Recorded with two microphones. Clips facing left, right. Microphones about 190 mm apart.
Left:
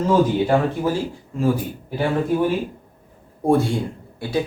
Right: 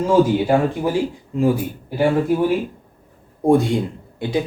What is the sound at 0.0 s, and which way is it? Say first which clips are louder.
Speech: right 2 dB; 15° right (ahead or behind).